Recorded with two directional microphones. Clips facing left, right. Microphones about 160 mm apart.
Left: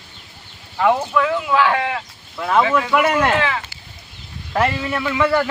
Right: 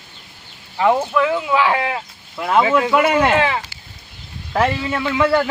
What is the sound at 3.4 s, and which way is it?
Speech, 40° right (ahead or behind).